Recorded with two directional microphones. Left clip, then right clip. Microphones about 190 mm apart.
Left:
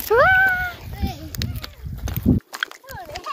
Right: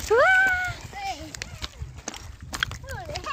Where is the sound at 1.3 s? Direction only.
40° left (ahead or behind).